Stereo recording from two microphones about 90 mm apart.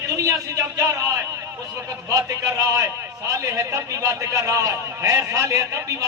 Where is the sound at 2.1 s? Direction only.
40° right (ahead or behind).